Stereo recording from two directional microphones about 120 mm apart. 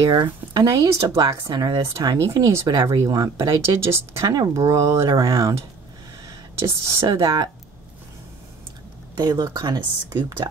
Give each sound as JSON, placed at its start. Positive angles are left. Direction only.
{"t": 0.0, "sound": "speech", "side_deg": -35}
{"t": 6.2, "sound": "a sound", "side_deg": -25}
{"t": 7.2, "sound": "speech", "side_deg": -35}
{"t": 9.1, "sound": "speech", "side_deg": -40}